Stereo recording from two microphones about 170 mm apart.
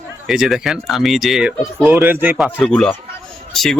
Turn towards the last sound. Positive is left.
turn(degrees=0)  # may be behind; listen again after turning